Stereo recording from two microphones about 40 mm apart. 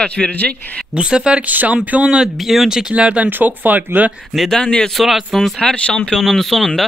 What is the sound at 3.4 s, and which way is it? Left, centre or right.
Speech, right.